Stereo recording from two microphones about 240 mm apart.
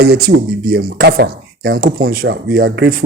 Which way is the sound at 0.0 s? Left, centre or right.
Right.